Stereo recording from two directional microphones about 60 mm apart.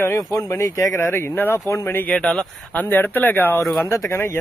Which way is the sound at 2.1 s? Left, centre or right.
Centre.